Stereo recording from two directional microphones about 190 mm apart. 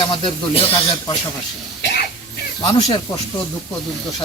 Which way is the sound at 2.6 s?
25° left (ahead or behind).